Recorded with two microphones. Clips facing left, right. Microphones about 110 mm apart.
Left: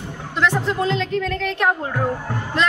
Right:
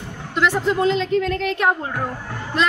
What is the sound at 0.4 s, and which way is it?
A woman's voice, centre (ahead or behind).